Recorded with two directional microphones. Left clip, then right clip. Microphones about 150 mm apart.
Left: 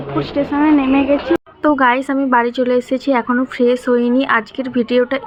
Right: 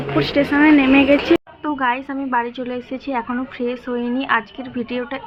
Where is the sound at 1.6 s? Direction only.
45° left (ahead or behind).